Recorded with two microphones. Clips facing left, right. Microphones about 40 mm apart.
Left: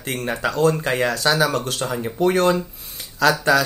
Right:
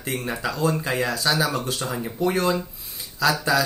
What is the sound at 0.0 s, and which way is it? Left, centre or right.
Speech, left.